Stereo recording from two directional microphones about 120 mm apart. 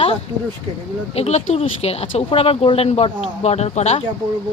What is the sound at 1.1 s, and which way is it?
Speech, 65° left (ahead or behind).